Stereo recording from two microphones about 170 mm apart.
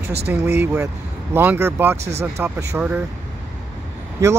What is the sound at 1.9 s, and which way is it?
Speech, 40° right (ahead or behind).